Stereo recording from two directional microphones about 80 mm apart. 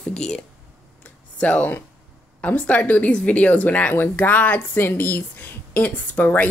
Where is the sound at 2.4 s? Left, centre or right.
Centre.